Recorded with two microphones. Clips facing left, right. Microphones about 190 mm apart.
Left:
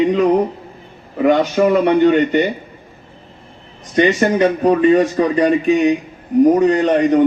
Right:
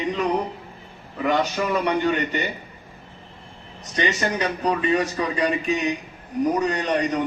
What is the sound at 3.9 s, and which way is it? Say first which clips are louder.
Speech: left 10 dB; 50° left (ahead or behind).